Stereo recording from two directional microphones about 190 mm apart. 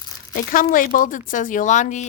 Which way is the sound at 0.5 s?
45° left (ahead or behind).